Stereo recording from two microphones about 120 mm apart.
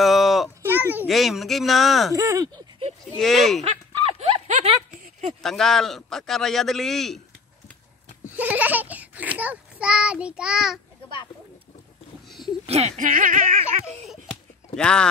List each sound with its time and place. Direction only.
0.0 s a sound: centre (ahead or behind)
0.6 s a sound: 15° right (ahead or behind)
1.0 s a man's voice: centre (ahead or behind)
2.1 s speech: 25° right (ahead or behind)
3.2 s a man's voice: centre (ahead or behind)
3.6 s a sound: 65° right (ahead or behind)
5.4 s a man's voice: 5° left (ahead or behind)
8.3 s a child's voice: 15° right (ahead or behind)
12.6 s speech: 60° right (ahead or behind); by 13.7 s 90° right
14.8 s speech: 5° left (ahead or behind)